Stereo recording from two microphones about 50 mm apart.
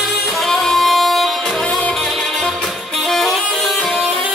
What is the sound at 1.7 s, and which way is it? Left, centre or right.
Music, centre.